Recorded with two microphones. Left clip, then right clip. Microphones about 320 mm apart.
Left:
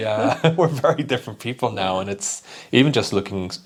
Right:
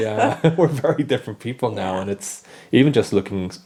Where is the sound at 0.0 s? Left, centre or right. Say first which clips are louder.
Right 1 dB; left.